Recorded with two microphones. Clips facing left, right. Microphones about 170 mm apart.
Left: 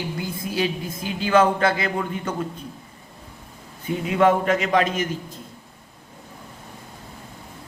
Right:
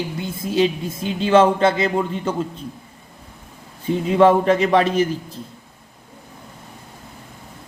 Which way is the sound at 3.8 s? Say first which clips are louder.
Right 4 dB; 30° right (ahead or behind).